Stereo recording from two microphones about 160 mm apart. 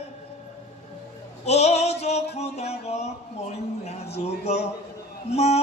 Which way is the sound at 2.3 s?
40° left (ahead or behind).